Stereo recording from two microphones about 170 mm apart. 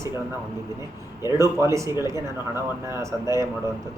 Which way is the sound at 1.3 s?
15° right (ahead or behind).